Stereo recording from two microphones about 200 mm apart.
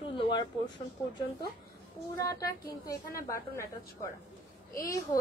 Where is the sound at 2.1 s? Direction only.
15° left (ahead or behind).